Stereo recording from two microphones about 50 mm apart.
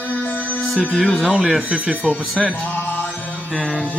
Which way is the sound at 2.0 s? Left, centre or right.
Centre.